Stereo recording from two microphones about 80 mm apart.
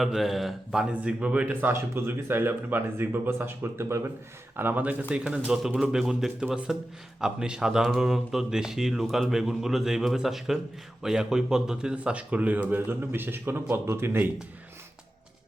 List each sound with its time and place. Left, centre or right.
0.0 s a man's voice: centre; by 14.3 s right